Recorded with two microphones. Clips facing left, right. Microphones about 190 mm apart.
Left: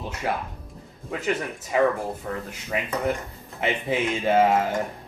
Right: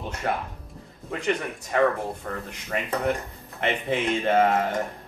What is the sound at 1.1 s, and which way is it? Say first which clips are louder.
Speech: even; 5° left (ahead or behind).